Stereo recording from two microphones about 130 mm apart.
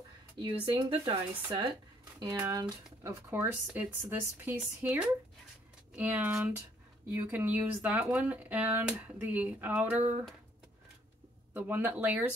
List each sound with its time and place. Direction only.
0.4 s speech: 40° right (ahead or behind)
3.0 s speech: 20° right (ahead or behind)
11.5 s speech: 15° right (ahead or behind)